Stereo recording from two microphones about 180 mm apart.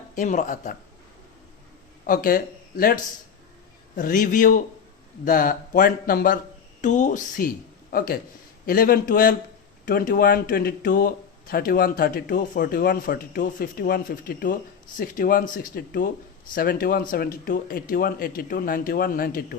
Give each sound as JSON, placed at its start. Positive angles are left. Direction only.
{"t": 0.2, "sound": "speech", "side_deg": 45}
{"t": 2.0, "sound": "speech", "side_deg": 50}